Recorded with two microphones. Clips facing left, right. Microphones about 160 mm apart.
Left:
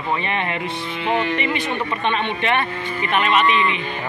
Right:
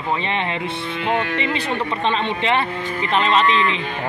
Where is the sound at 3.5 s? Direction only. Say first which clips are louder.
Even; 20° left (ahead or behind).